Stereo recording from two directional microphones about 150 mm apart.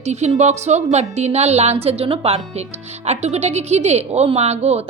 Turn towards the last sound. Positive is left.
turn(degrees=-45)  # may be behind; listen again after turning